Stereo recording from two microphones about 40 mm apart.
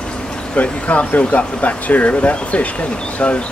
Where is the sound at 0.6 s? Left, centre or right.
Left.